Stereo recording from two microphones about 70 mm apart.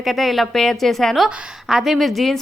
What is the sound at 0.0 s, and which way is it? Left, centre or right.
A woman's voice, centre.